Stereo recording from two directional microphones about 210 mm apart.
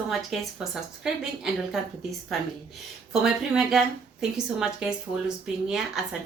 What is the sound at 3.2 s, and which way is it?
A woman's voice, centre (ahead or behind).